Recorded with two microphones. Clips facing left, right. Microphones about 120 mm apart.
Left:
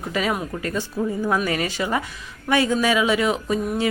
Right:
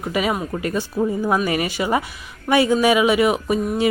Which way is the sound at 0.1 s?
10° right (ahead or behind).